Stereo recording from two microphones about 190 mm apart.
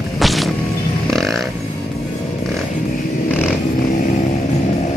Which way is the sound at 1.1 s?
Centre (ahead or behind).